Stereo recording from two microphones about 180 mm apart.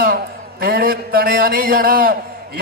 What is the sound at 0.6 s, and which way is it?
A man's voice, 55° right (ahead or behind).